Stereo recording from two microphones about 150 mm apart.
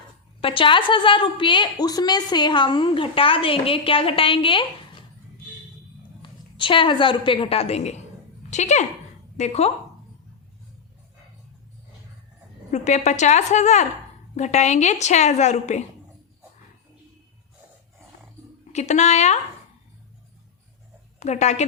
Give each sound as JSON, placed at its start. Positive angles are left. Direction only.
{"t": 0.4, "sound": "a woman's voice", "side_deg": 35}
{"t": 6.2, "sound": "a woman's voice", "side_deg": 35}
{"t": 12.7, "sound": "a woman's voice", "side_deg": 50}
{"t": 18.7, "sound": "a woman's voice", "side_deg": 50}
{"t": 21.2, "sound": "a woman's voice", "side_deg": 50}